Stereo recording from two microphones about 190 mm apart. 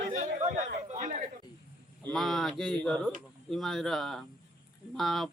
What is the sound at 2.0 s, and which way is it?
Speech, centre (ahead or behind).